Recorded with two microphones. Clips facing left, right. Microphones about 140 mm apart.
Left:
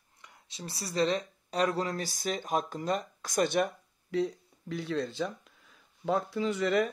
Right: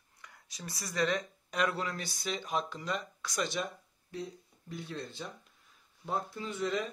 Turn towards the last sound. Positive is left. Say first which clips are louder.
# left 7 dB
turn(degrees=75)  # may be behind; listen again after turning